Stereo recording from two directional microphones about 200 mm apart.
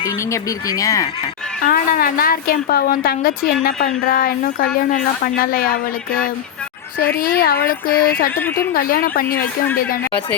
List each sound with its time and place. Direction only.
0.0 s speech: 15° left (ahead or behind)
1.6 s a woman's voice: 45° left (ahead or behind)
7.2 s a woman's voice: 50° left (ahead or behind)